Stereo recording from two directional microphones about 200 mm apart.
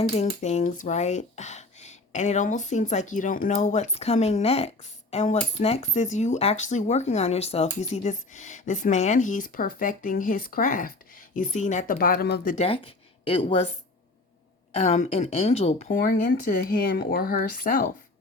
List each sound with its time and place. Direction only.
0.0 s speech: 35° left (ahead or behind); by 12.5 s 50° left (ahead or behind)
12.5 s speech: 30° left (ahead or behind)
14.7 s speech: 35° left (ahead or behind)